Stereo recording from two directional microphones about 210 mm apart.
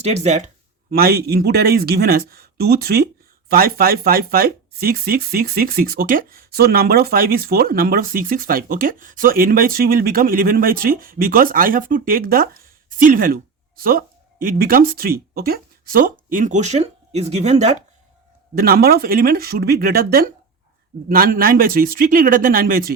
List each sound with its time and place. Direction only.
0.0 s speech: 30° right (ahead or behind)
1.0 s speech: 50° right (ahead or behind); by 17.7 s 30° right (ahead or behind)
18.5 s speech: 45° right (ahead or behind)